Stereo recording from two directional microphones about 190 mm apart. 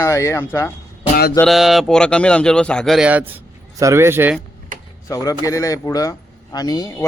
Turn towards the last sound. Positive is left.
turn(degrees=15)  # may be behind; listen again after turning